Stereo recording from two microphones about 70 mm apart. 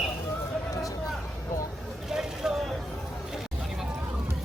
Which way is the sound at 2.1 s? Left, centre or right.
Centre.